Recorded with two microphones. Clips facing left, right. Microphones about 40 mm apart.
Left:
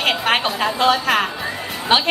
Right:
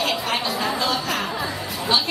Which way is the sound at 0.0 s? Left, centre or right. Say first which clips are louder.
Left 5 dB; left.